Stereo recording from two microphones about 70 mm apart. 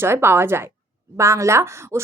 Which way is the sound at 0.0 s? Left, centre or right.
Right.